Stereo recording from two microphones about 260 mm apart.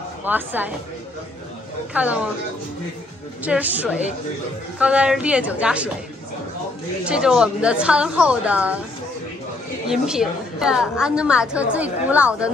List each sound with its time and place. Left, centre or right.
0.2 s a woman's voice: centre
2.0 s a woman's voice: centre
3.4 s a woman's voice: centre
7.1 s a woman's voice: centre
9.8 s a woman's voice: centre